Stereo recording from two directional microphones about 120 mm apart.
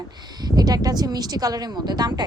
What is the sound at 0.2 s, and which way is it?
A woman's voice, 35° right (ahead or behind).